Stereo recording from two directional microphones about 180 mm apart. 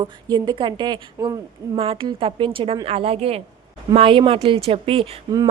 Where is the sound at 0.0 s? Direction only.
25° right (ahead or behind).